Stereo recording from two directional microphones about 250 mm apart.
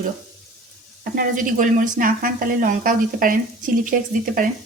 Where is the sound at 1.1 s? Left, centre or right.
Right.